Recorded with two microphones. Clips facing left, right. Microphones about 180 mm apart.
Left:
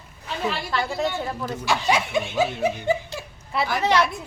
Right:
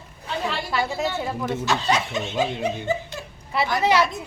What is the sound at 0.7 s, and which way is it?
Speech, 5° right (ahead or behind).